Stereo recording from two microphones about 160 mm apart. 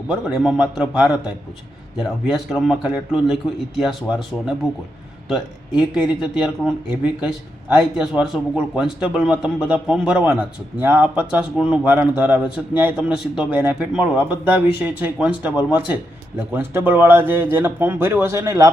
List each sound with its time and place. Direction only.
0.1 s a man's voice: 5° right (ahead or behind); by 18.7 s 20° right (ahead or behind)